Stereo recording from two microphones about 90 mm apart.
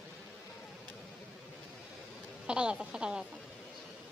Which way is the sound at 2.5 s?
10° right (ahead or behind).